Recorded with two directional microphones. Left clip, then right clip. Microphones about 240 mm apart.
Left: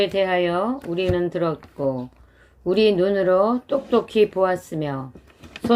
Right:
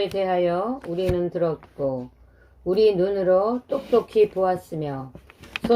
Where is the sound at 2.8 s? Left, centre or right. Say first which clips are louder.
Left 1 dB; left.